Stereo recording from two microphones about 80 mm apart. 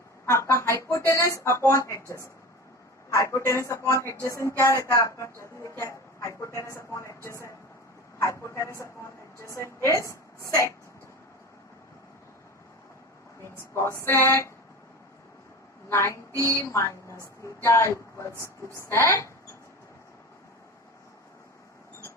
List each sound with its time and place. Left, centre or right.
0.3 s a woman's voice: left
13.7 s speech: left
15.9 s speech: left